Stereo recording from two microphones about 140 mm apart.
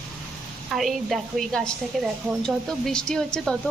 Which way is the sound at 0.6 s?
Centre (ahead or behind).